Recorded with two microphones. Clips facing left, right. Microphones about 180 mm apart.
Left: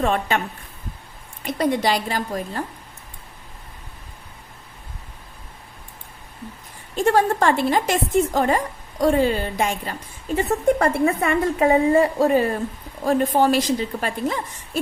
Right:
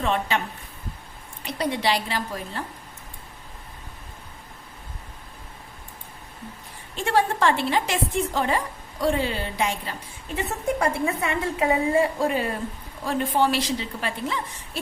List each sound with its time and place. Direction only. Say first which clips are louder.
0.0 s a woman's voice: left 3 dB; 50° left (ahead or behind)
1.5 s a woman's voice: left 4 dB; 45° left (ahead or behind)
6.9 s a woman's voice: left 5 dB; 45° left (ahead or behind)